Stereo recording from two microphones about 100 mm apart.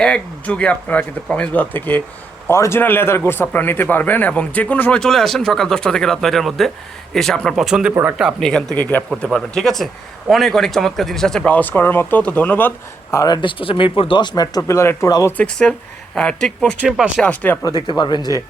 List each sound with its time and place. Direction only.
0.0 s a man's voice: 10° left (ahead or behind); by 7.9 s 5° right (ahead or behind)
8.4 s a man's voice: 5° left (ahead or behind)
13.1 s speech: 35° left (ahead or behind); by 14.3 s 60° left (ahead or behind)
14.3 s speech: 40° left (ahead or behind)
14.7 s speech: 30° left (ahead or behind)
15.3 s a man's voice: 10° left (ahead or behind)
17.6 s speech: 35° left (ahead or behind)
17.8 s speech: 50° left (ahead or behind)